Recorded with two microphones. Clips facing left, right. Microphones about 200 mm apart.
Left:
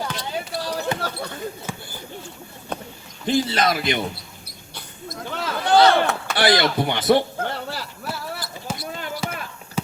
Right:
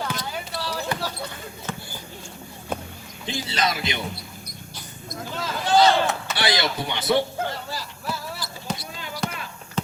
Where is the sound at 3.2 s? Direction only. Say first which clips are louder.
Left 6 dB; 55° left (ahead or behind).